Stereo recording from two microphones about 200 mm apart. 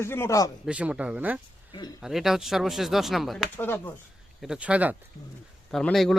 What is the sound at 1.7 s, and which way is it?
Speech, 20° left (ahead or behind).